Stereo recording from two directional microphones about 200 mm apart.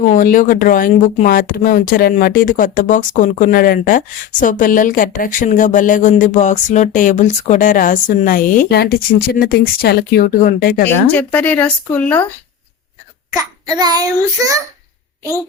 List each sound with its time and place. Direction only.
0.1 s speech: 40° left (ahead or behind)
11.1 s speech: 10° left (ahead or behind)
13.3 s a child's voice: 20° right (ahead or behind)